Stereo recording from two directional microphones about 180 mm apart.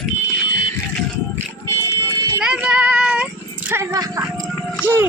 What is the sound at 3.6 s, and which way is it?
Speech, 15° right (ahead or behind).